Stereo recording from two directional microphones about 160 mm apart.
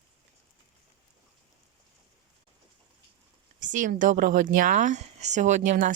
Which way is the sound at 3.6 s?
50° right (ahead or behind).